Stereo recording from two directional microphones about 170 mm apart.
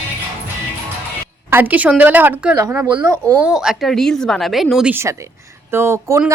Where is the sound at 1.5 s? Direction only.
10° right (ahead or behind).